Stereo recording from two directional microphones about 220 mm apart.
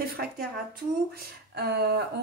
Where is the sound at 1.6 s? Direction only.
50° right (ahead or behind).